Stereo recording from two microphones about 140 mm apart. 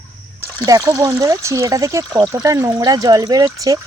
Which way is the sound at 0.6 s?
25° right (ahead or behind).